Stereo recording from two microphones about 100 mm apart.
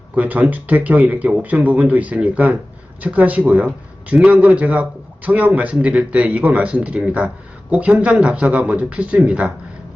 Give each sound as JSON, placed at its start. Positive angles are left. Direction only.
{"t": 0.1, "sound": "speech", "side_deg": -15}